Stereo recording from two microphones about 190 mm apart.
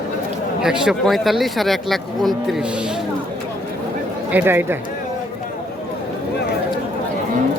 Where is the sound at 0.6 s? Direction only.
5° right (ahead or behind).